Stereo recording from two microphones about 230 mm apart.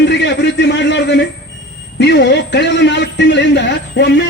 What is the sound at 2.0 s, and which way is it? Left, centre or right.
A man's voice, left.